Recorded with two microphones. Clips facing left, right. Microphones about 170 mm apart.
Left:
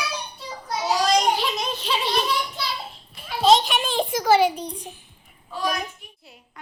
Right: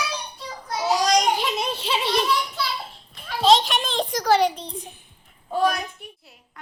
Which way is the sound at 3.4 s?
Centre (ahead or behind).